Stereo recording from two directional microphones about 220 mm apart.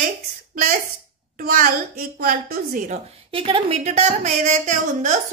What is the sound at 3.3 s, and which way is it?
A woman's voice, 25° right (ahead or behind).